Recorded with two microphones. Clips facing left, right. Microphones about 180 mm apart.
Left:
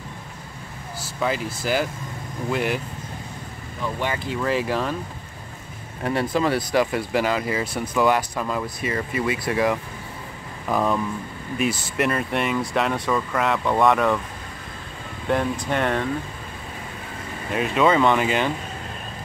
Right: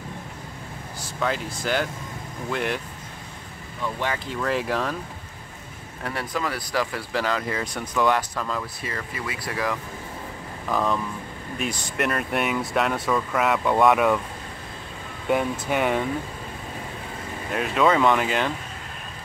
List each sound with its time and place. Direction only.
1.0 s speech: 5° left (ahead or behind)
3.8 s speech: 5° left (ahead or behind)
6.0 s speech: 25° left (ahead or behind)
10.7 s speech: 10° left (ahead or behind)
15.2 s speech: 5° right (ahead or behind)
17.5 s speech: centre (ahead or behind)